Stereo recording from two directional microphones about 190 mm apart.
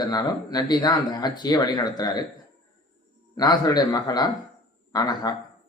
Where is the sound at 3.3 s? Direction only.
20° left (ahead or behind).